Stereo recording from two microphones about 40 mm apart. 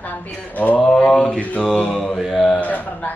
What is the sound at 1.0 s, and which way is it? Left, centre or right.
Mantra, left.